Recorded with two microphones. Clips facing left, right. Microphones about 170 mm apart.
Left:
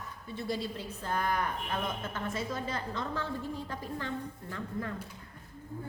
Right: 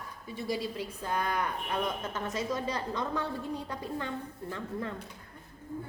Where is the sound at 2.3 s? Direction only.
20° right (ahead or behind).